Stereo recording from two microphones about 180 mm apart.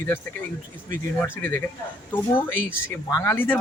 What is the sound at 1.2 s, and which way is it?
Speech, 10° left (ahead or behind).